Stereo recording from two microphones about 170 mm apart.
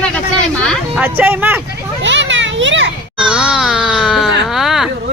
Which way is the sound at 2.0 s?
90° right.